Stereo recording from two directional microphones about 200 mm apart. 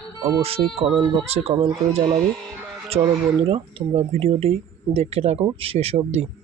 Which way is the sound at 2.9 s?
30° right (ahead or behind).